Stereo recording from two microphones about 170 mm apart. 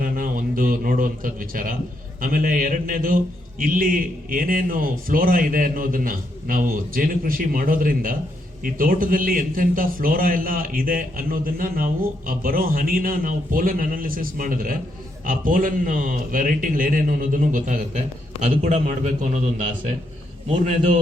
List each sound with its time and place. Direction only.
0.0 s a man's voice: 55° right (ahead or behind)